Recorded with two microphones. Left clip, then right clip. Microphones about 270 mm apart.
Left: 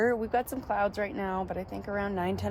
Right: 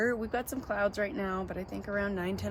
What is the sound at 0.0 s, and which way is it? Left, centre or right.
Speech, centre.